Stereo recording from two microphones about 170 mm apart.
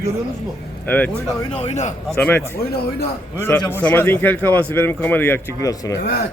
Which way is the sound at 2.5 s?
65° left (ahead or behind).